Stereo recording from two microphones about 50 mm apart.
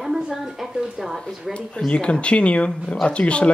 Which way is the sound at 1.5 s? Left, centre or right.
Left.